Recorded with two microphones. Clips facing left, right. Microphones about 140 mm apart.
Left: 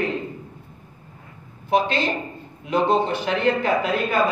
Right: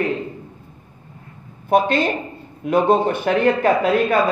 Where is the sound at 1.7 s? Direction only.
50° right (ahead or behind).